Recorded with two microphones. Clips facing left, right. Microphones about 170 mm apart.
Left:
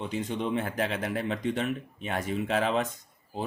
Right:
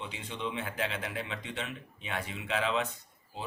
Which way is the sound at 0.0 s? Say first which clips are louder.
Left 7 dB; 45° left (ahead or behind).